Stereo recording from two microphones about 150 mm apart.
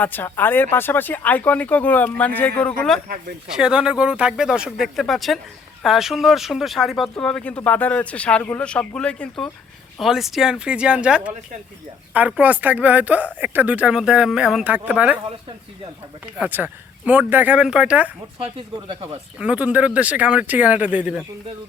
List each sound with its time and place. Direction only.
0.0 s speech: 15° left (ahead or behind)
3.5 s a woman's voice: 5° right (ahead or behind)
16.2 s a woman's voice: 10° right (ahead or behind)
18.3 s speech: 40° right (ahead or behind)
19.4 s a woman's voice: 10° right (ahead or behind)